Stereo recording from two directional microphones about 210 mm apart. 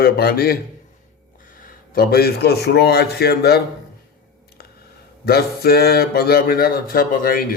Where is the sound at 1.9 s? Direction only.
50° left (ahead or behind).